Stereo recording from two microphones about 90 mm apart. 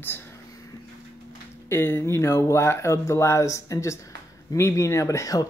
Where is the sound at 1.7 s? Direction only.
25° left (ahead or behind).